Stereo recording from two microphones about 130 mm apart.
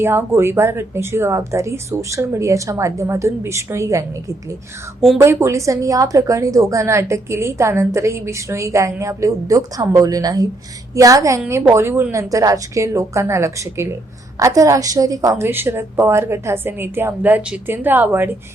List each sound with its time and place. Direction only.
0.0 s a woman's voice: 15° right (ahead or behind)
5.1 s a woman's voice: 20° right (ahead or behind)